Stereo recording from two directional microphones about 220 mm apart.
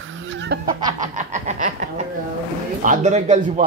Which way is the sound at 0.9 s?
35° right (ahead or behind).